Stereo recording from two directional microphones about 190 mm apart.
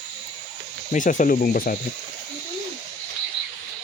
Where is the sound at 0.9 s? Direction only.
45° left (ahead or behind).